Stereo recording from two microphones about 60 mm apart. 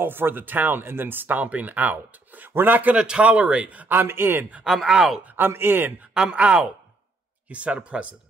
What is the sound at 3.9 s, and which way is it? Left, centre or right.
Speech, right.